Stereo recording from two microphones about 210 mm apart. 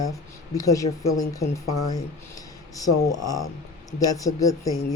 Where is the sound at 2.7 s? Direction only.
15° left (ahead or behind).